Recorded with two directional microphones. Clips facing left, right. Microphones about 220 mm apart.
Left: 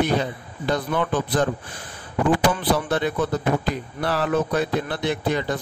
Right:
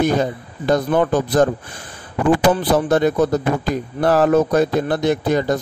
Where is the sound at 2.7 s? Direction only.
45° right (ahead or behind).